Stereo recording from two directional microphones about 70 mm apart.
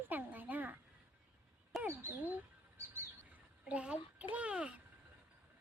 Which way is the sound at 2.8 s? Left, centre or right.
Right.